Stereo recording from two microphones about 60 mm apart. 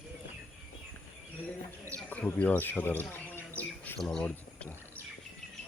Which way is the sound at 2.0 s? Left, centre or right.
Left.